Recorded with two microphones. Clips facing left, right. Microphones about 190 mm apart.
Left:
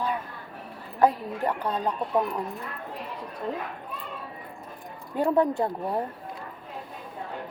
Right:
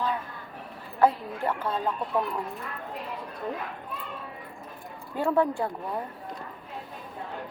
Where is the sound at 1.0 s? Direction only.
20° left (ahead or behind).